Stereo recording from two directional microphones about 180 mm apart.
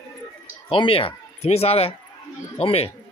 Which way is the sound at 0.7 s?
30° left (ahead or behind).